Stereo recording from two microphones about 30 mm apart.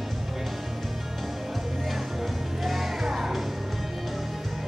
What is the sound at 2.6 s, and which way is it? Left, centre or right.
Music, centre.